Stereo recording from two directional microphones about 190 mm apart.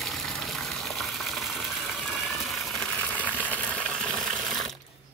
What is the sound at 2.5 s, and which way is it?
Coin, centre (ahead or behind).